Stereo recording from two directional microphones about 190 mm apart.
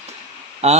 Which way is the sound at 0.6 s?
35° right (ahead or behind).